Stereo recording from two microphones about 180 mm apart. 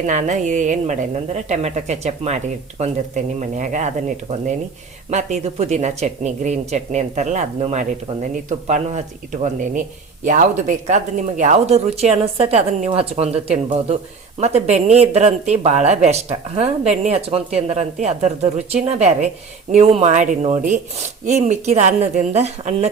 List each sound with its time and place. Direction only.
0.0 s a woman's voice: 45° right (ahead or behind)